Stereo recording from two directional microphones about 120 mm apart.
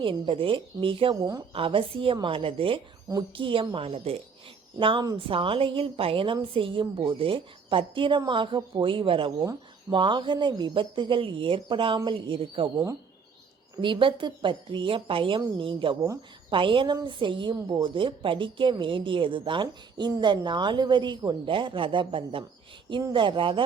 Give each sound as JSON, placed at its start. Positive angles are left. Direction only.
{"t": 0.0, "sound": "a woman's voice", "side_deg": -50}
{"t": 13.8, "sound": "a woman's voice", "side_deg": -45}